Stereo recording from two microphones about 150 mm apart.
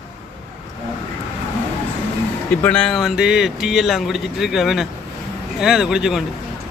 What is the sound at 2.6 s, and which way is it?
Speech, 10° left (ahead or behind).